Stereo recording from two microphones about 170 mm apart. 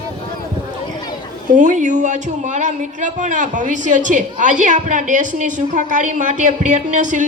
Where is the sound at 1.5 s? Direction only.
45° right (ahead or behind).